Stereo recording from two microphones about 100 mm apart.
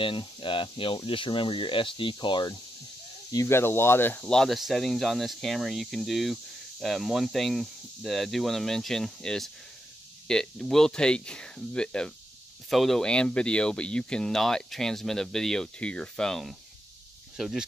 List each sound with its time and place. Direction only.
0.0 s speech: 55° left (ahead or behind)
3.4 s speech: 25° left (ahead or behind)
4.2 s speech: 5° left (ahead or behind)